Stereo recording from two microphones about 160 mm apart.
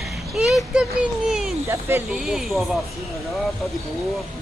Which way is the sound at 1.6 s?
15° right (ahead or behind).